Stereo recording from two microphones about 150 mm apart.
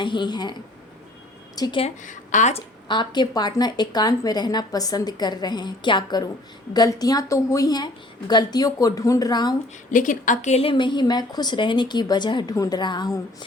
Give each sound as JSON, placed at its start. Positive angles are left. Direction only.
{"t": 0.0, "sound": "a woman's voice", "side_deg": 30}
{"t": 1.5, "sound": "speech", "side_deg": 25}
{"t": 2.0, "sound": "a woman's voice", "side_deg": 55}
{"t": 2.8, "sound": "a woman's voice", "side_deg": 30}
{"t": 9.9, "sound": "a woman's voice", "side_deg": 60}